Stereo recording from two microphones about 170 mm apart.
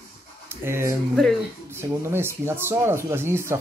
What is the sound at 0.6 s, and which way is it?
Speech, 15° right (ahead or behind).